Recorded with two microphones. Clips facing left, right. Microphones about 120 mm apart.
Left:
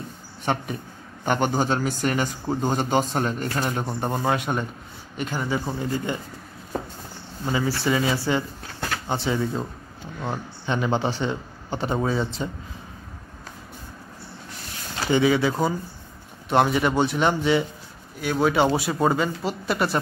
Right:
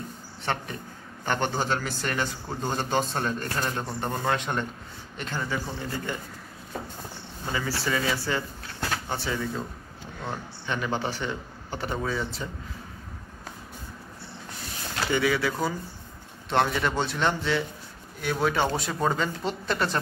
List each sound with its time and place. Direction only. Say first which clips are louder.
0.5 s a man's voice: left 5 dB; 15° left (ahead or behind)
7.4 s a man's voice: left 6 dB; 15° left (ahead or behind)
15.1 s a man's voice: left 6 dB; 25° left (ahead or behind)
18.2 s a man's voice: left 5 dB; 5° left (ahead or behind)